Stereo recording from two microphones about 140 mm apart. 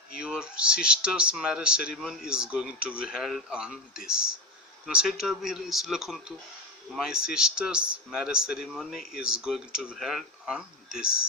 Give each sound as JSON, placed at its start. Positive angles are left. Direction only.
{"t": 0.1, "sound": "speech", "side_deg": -5}